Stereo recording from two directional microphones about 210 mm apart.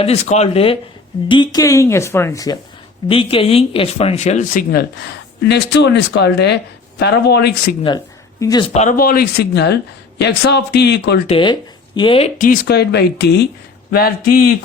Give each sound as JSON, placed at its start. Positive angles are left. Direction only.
{"t": 0.0, "sound": "speech", "side_deg": 30}
{"t": 5.5, "sound": "speech", "side_deg": 55}
{"t": 7.9, "sound": "a sound", "side_deg": 15}
{"t": 8.7, "sound": "speech", "side_deg": 35}
{"t": 11.3, "sound": "speech", "side_deg": 25}
{"t": 12.4, "sound": "speech", "side_deg": 45}